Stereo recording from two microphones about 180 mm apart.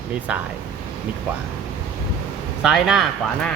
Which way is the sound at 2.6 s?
5° right (ahead or behind).